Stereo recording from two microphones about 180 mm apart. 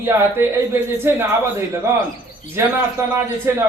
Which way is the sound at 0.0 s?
15° right (ahead or behind).